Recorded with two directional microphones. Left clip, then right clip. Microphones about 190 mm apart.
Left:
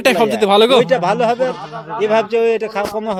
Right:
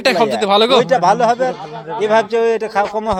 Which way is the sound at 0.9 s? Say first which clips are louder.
Right 2 dB; 20° left (ahead or behind).